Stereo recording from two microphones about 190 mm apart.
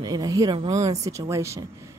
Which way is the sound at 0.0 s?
20° right (ahead or behind).